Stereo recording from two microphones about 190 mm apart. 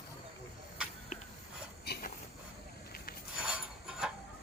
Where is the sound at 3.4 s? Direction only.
5° right (ahead or behind).